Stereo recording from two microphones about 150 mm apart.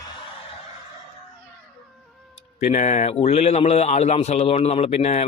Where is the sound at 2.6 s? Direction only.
50° left (ahead or behind).